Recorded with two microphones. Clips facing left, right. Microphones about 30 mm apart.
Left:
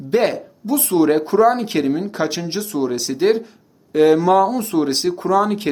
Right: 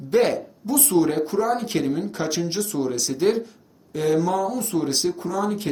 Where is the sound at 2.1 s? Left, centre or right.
Left.